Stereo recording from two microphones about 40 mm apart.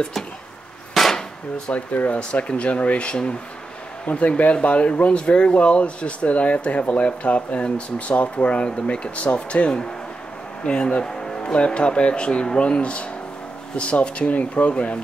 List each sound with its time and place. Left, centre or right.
1.0 s hammer: centre
1.7 s speech: left